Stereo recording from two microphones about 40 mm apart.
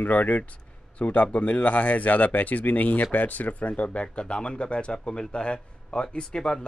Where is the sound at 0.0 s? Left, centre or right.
Left.